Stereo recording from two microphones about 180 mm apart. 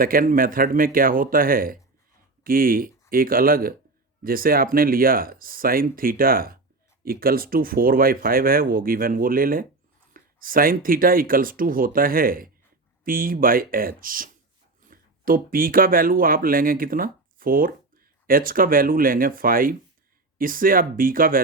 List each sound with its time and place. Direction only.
0.0 s speech: 50° right (ahead or behind)